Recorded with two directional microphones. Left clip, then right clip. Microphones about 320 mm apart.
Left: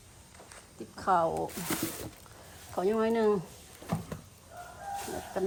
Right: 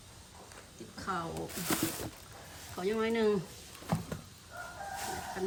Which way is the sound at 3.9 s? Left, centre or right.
Centre.